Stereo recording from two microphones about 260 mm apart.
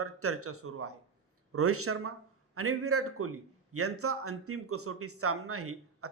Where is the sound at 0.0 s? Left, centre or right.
Right.